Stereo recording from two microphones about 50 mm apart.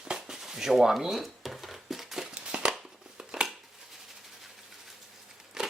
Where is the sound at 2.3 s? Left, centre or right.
Centre.